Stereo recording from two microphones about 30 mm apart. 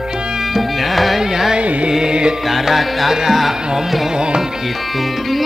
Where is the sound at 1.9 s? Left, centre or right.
Right.